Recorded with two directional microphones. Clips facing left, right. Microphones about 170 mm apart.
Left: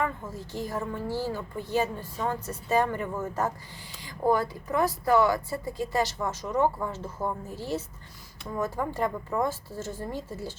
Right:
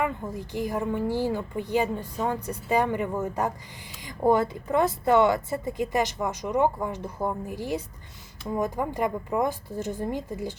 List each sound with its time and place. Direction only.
0.0 s speech: 15° right (ahead or behind)